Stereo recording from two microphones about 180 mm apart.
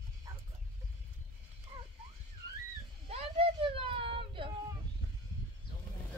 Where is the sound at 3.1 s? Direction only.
35° right (ahead or behind).